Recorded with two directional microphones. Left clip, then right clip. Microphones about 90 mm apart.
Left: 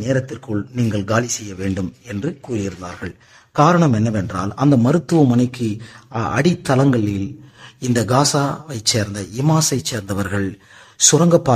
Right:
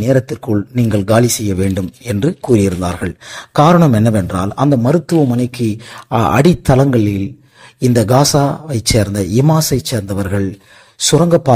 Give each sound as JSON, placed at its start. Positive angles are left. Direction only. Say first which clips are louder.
{"t": 0.0, "sound": "a man's voice", "louder": "right 7 dB", "side_deg": -35}
{"t": 5.9, "sound": "speech", "louder": "right 9 dB", "side_deg": -55}
{"t": 6.6, "sound": "a man's voice", "louder": "right 5 dB", "side_deg": -25}
{"t": 7.8, "sound": "speech", "louder": "right 5 dB", "side_deg": -35}
{"t": 8.9, "sound": "speech", "louder": "right 9 dB", "side_deg": -40}
{"t": 9.6, "sound": "a man's voice", "louder": "right 4 dB", "side_deg": -25}